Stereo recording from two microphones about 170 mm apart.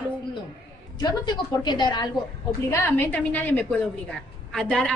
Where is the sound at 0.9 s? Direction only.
25° left (ahead or behind).